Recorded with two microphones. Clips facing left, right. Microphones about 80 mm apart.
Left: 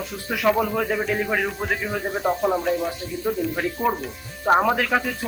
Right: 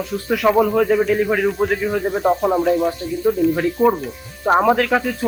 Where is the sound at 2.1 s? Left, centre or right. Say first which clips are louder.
Right 4 dB; centre.